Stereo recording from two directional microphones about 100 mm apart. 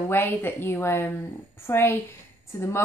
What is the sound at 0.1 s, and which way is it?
A woman's voice, 20° left (ahead or behind).